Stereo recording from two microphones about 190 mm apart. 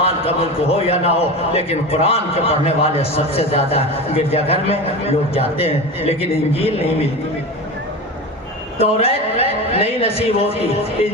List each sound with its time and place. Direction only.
0.7 s a man's voice: 30° left (ahead or behind)
8.8 s a man's voice: 30° left (ahead or behind)